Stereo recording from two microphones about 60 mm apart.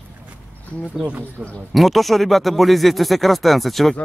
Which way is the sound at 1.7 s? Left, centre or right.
Centre.